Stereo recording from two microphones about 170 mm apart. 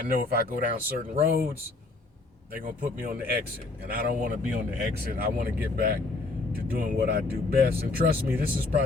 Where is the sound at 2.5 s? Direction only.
55° right (ahead or behind).